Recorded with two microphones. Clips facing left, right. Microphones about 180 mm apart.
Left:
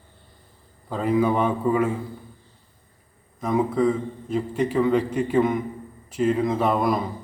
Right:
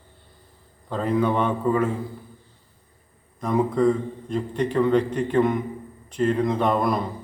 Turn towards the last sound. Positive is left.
turn(degrees=0)  # may be behind; listen again after turning